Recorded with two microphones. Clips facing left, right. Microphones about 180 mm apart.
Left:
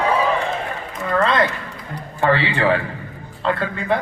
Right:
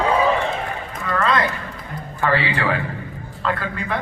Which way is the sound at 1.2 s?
25° left (ahead or behind).